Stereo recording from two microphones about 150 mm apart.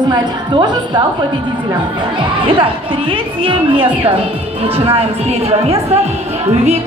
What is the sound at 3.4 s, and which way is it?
Speech, 35° right (ahead or behind).